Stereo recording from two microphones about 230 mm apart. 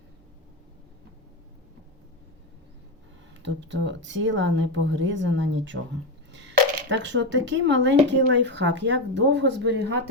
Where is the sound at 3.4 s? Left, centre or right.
Right.